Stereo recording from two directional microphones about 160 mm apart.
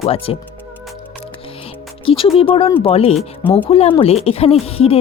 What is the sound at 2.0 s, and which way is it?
A woman's voice, 35° left (ahead or behind).